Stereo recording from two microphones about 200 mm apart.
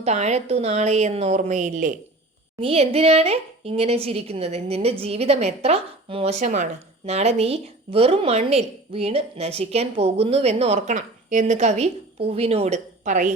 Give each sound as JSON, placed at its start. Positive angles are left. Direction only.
{"t": 0.0, "sound": "speech", "side_deg": -35}